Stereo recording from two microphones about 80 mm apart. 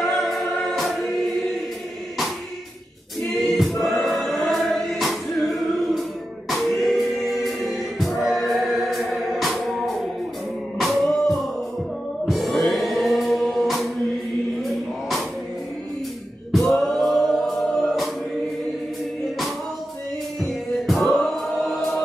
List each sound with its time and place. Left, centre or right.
0.0 s choir: centre
3.3 s choir: centre
6.5 s music: centre
16.7 s music: centre
20.3 s music: centre